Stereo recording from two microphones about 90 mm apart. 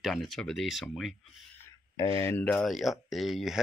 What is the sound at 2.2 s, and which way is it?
Speech, 30° left (ahead or behind).